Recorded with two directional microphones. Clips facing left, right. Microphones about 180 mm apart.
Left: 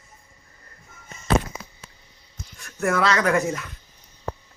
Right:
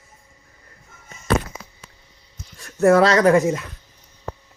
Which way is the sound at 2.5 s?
35° right (ahead or behind).